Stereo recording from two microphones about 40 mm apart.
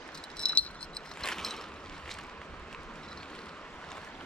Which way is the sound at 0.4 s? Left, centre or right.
Left.